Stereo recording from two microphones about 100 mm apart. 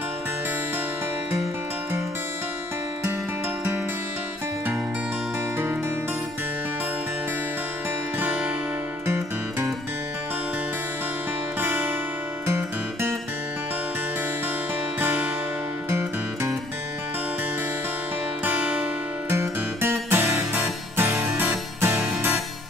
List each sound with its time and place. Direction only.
9.0 s music: 25° right (ahead or behind)
11.6 s music: 15° right (ahead or behind)
15.0 s music: 20° right (ahead or behind)
18.4 s music: 15° right (ahead or behind)
19.3 s music: 25° right (ahead or behind)